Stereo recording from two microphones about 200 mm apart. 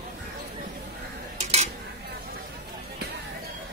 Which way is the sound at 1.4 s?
35° right (ahead or behind).